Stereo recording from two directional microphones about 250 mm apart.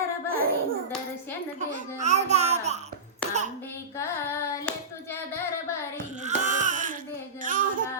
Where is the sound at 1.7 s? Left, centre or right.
Right.